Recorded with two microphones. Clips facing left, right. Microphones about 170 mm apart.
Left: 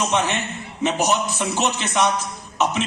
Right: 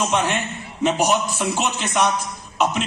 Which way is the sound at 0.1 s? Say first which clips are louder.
Even; 15° right (ahead or behind).